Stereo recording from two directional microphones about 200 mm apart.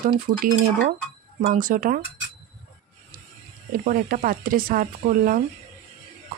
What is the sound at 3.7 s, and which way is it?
A woman's voice, 45° right (ahead or behind).